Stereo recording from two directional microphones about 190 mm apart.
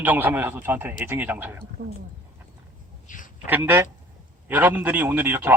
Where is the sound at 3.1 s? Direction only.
45° left (ahead or behind).